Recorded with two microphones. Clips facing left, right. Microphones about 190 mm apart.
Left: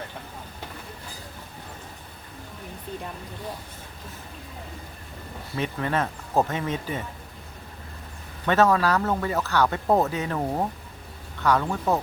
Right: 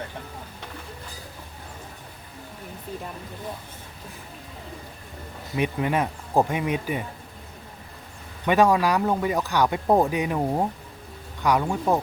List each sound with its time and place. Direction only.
5.5 s speech: 15° right (ahead or behind)
8.4 s speech: 15° right (ahead or behind)